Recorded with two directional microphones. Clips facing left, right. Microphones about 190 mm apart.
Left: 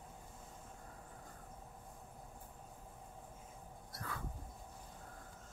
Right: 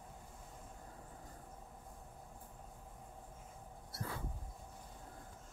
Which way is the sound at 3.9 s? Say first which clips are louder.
Right 2 dB; 30° right (ahead or behind).